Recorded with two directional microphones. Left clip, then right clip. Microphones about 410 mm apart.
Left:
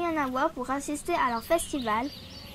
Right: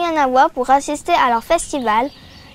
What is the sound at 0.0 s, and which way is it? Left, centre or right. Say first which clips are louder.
A woman's voice: right 14 dB; right.